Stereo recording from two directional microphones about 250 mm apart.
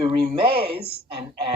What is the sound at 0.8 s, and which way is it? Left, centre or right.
Speech, right.